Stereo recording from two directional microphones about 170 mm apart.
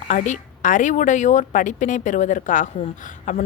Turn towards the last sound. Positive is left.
turn(degrees=45)  # may be behind; listen again after turning